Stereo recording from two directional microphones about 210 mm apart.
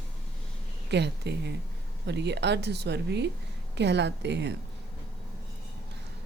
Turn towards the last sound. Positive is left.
turn(degrees=-55)  # may be behind; listen again after turning